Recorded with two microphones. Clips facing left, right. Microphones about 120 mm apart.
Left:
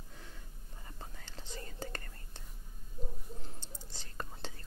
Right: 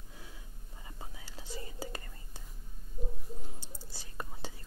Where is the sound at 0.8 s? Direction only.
5° right (ahead or behind).